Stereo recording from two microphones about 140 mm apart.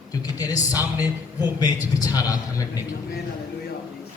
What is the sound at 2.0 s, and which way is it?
Speech, 25° left (ahead or behind).